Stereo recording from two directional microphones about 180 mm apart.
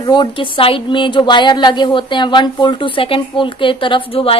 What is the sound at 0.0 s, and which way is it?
A woman's voice, 25° left (ahead or behind).